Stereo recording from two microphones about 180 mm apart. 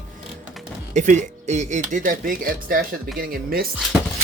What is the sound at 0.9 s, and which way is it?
Speech, 40° right (ahead or behind).